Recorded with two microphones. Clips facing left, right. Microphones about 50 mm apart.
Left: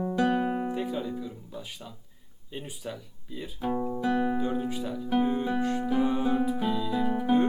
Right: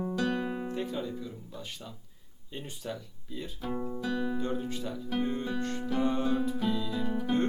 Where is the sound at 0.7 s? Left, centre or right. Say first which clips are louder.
Left 3 dB; centre.